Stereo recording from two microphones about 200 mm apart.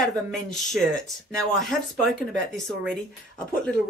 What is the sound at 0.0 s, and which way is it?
Speech, centre (ahead or behind).